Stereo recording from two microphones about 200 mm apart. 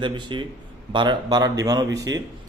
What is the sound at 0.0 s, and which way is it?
A man's voice, 25° right (ahead or behind).